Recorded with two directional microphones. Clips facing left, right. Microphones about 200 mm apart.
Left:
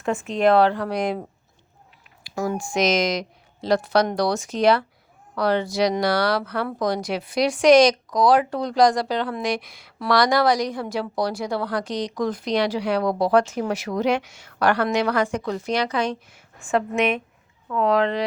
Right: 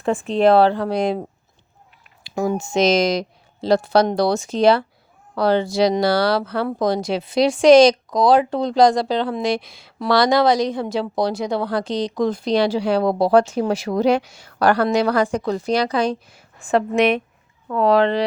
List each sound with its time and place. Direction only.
0.0 s speech: 30° right (ahead or behind)
2.2 s speech: 20° right (ahead or behind)